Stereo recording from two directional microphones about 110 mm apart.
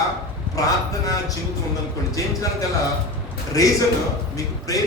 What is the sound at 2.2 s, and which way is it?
Speech, 30° left (ahead or behind).